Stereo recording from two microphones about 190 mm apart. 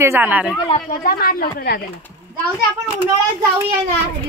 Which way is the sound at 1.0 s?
55° left (ahead or behind).